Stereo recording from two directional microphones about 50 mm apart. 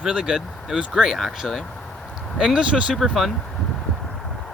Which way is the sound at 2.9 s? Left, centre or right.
Centre.